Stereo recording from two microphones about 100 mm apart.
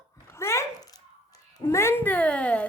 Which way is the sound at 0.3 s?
30° left (ahead or behind).